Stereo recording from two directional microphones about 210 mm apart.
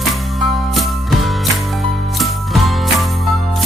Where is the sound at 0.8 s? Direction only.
Centre (ahead or behind).